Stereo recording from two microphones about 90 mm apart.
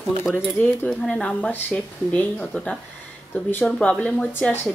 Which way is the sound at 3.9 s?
10° left (ahead or behind).